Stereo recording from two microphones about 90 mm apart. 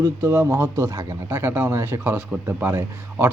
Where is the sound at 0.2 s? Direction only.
30° right (ahead or behind).